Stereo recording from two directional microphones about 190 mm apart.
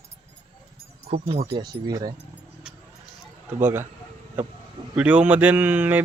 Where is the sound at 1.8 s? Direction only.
20° right (ahead or behind).